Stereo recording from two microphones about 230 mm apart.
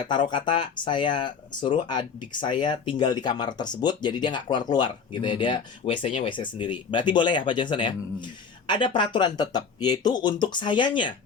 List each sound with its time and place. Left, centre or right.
0.0 s speech: centre